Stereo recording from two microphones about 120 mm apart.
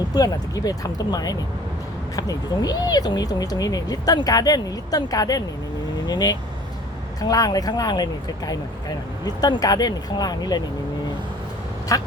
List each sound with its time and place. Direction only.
0.1 s speech: 35° left (ahead or behind)
11.9 s quack: 30° left (ahead or behind)